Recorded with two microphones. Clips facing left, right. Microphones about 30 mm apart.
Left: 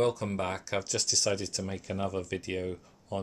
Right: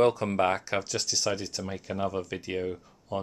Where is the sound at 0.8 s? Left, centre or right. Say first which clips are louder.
Even; centre.